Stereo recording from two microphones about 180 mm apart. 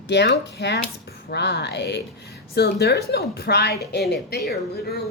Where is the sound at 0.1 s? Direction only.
70° left (ahead or behind).